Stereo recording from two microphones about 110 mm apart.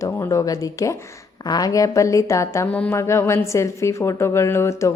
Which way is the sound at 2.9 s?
25° left (ahead or behind).